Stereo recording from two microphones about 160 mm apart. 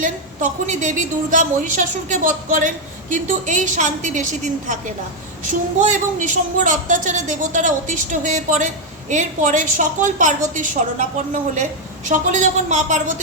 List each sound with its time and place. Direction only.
0.0 s speech: 50° right (ahead or behind)